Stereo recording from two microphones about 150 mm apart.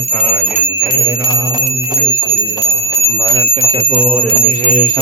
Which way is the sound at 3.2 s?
35° right (ahead or behind).